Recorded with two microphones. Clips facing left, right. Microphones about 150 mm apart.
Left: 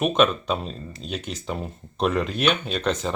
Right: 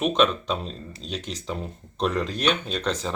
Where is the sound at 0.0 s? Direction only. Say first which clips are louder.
Left 1 dB; 5° left (ahead or behind).